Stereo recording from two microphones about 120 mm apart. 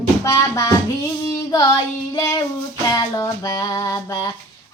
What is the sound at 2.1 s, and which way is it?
Child singing, 30° left (ahead or behind).